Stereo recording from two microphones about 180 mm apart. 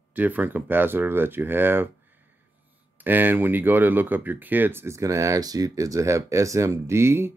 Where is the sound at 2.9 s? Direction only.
10° right (ahead or behind).